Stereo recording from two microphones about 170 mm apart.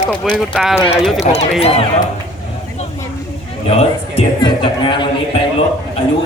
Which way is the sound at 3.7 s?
35° left (ahead or behind).